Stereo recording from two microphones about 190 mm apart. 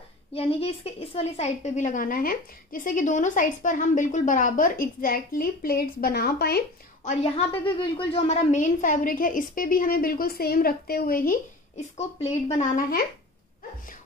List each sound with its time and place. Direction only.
0.3 s a woman's voice: 30° left (ahead or behind); by 6.6 s 55° left (ahead or behind)
7.1 s a woman's voice: 35° left (ahead or behind); by 11.3 s 50° left (ahead or behind)
12.0 s speech: 35° left (ahead or behind)